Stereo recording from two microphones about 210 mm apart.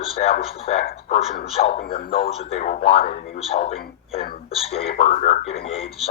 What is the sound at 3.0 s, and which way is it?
Speech, 45° left (ahead or behind).